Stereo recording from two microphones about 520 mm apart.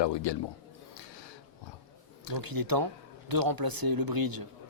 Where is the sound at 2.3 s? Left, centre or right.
Right.